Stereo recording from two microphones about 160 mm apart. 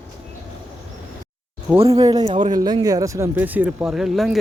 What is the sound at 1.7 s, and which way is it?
A man's voice, 20° right (ahead or behind).